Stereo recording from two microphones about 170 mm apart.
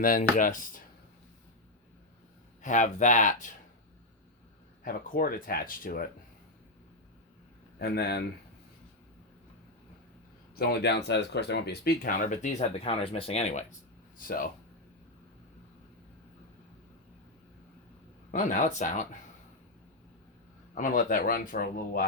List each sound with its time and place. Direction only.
0.0 s speech: 55° left (ahead or behind)
2.6 s speech: 50° left (ahead or behind)
4.8 s speech: 55° left (ahead or behind)
7.8 s speech: 75° left (ahead or behind)
10.5 s speech: 70° left (ahead or behind); by 13.7 s 45° left (ahead or behind)
14.3 s speech: 55° left (ahead or behind)
18.3 s speech: 45° left (ahead or behind)
20.7 s speech: 50° left (ahead or behind)